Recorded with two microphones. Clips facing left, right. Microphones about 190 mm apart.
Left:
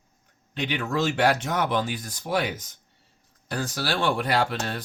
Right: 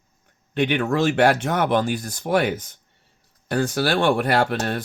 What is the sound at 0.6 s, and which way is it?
Speech, 55° right (ahead or behind).